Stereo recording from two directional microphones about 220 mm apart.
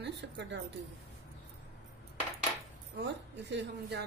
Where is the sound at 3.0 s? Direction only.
50° right (ahead or behind).